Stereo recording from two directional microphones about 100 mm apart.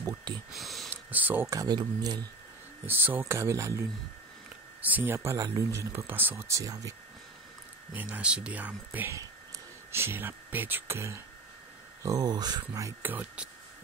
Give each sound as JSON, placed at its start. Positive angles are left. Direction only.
{"t": 0.0, "sound": "speech", "side_deg": -45}
{"t": 0.5, "sound": "speech", "side_deg": 0}
{"t": 0.8, "sound": "a sound", "side_deg": -15}
{"t": 1.5, "sound": "speech", "side_deg": -40}
{"t": 2.9, "sound": "speech", "side_deg": -20}
{"t": 4.8, "sound": "speech", "side_deg": -20}
{"t": 6.3, "sound": "speech", "side_deg": -30}
{"t": 7.9, "sound": "speech", "side_deg": -15}
{"t": 12.0, "sound": "speech", "side_deg": -40}
{"t": 13.0, "sound": "speech", "side_deg": -15}